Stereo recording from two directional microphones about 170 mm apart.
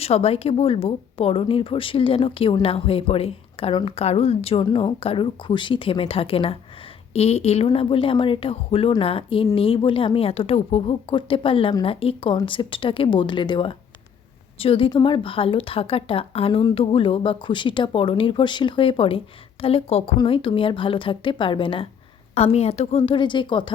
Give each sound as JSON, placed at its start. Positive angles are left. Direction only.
{"t": 0.0, "sound": "a woman's voice", "side_deg": 35}